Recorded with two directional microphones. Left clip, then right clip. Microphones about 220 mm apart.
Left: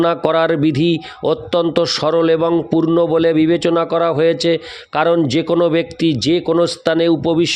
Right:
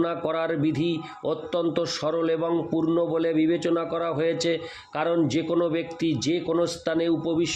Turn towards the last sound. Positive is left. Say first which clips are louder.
# left 10 dB
turn(degrees=40)  # may be behind; listen again after turning